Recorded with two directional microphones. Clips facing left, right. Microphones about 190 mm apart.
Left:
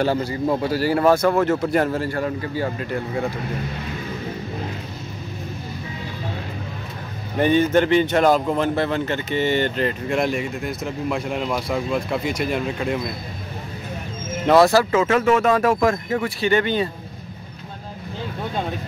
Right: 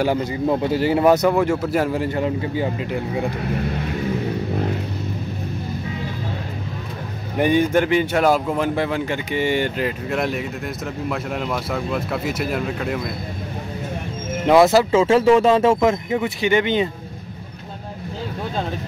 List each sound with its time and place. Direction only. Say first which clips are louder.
0.0 s speech: right 1 dB; 15° right (ahead or behind)
7.3 s speech: even; 10° right (ahead or behind)
14.4 s speech: right 1 dB; 20° right (ahead or behind)